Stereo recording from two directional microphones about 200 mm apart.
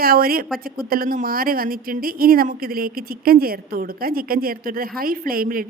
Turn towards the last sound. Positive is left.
turn(degrees=-45)  # may be behind; listen again after turning